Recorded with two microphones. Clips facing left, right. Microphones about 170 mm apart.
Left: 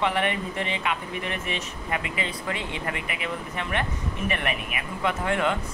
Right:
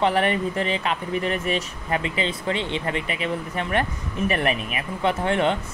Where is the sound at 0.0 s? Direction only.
35° right (ahead or behind).